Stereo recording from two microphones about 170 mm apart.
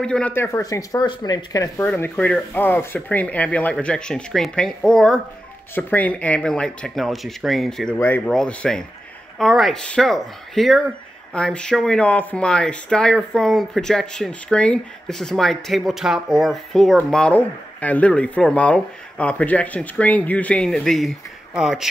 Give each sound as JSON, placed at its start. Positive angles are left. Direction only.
{"t": 0.0, "sound": "speech", "side_deg": 5}
{"t": 1.9, "sound": "speech", "side_deg": 10}